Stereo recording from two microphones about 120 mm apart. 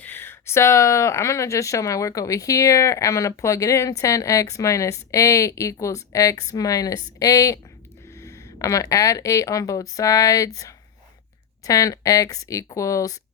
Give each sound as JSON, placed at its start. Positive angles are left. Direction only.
{"t": 0.0, "sound": "speech", "side_deg": 20}